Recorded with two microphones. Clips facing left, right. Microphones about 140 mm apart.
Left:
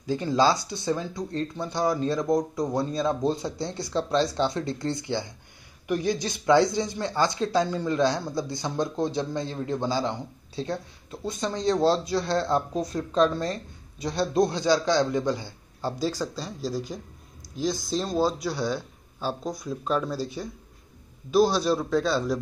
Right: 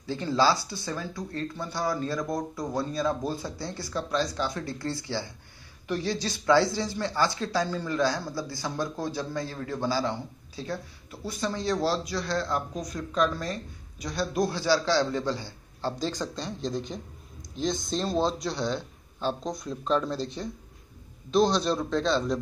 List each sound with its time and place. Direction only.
0.0 s a man's voice: 15° left (ahead or behind)